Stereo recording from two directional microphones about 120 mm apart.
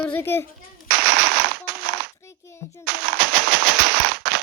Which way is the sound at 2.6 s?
70° left (ahead or behind).